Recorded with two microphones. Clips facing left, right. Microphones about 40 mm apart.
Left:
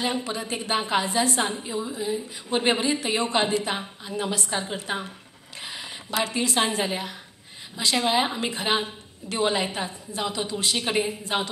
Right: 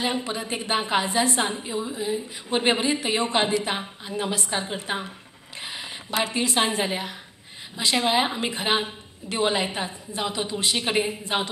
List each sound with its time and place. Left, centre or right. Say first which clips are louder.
0.0 s a woman's voice: right 1 dB; right
5.6 s a sound: right 1 dB; right
6.2 s a woman's voice: right 1 dB; right